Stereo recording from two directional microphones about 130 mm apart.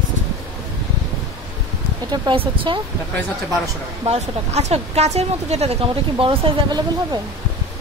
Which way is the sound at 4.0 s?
55° right (ahead or behind).